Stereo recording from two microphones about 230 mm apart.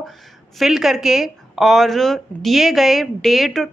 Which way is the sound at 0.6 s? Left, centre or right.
Centre.